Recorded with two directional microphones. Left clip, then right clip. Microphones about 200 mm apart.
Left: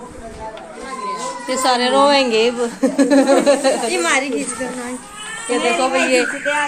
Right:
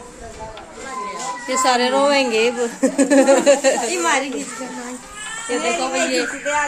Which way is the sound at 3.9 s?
40° right (ahead or behind).